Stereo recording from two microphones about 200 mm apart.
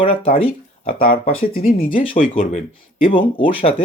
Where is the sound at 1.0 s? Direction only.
45° left (ahead or behind).